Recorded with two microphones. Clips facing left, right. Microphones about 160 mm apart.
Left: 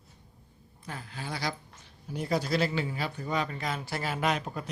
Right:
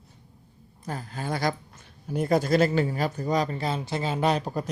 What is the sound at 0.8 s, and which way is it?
A man's voice, 40° right (ahead or behind).